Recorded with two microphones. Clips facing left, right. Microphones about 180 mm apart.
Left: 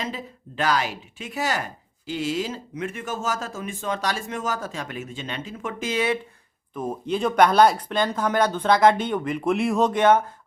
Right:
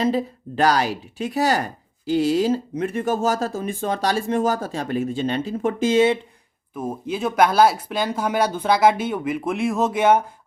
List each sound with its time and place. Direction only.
0.0 s speech: 35° right (ahead or behind)
6.7 s speech: 5° right (ahead or behind)